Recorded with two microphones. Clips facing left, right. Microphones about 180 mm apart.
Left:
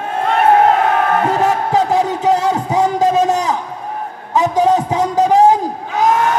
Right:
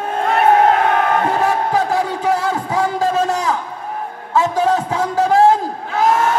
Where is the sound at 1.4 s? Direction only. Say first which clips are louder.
Left 2 dB; 20° left (ahead or behind).